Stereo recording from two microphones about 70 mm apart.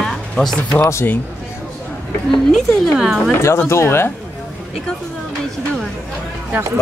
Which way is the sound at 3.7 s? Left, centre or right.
Left.